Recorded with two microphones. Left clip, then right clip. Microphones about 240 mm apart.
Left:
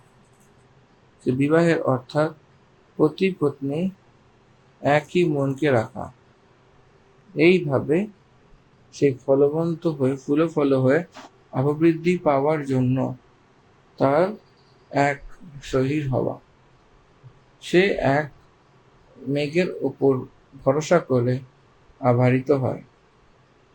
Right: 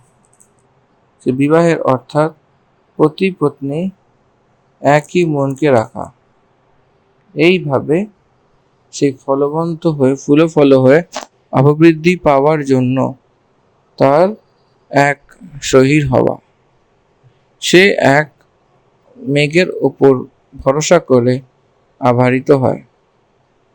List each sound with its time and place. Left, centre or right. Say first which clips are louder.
1.2 s speech: right 8 dB; centre
7.3 s a man's voice: right 6 dB; centre; by 16.1 s right
17.6 s a man's voice: right 11 dB; right
19.3 s a man's voice: right 11 dB; right